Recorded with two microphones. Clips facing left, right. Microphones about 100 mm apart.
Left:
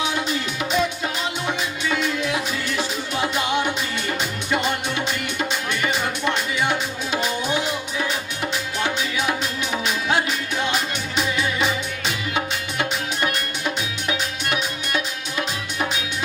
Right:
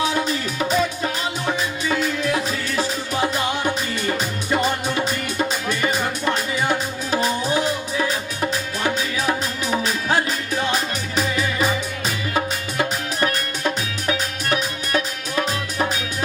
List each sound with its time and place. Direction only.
0.0 s music: 40° right (ahead or behind)
8.8 s music: 35° right (ahead or behind)
14.1 s music: 40° right (ahead or behind)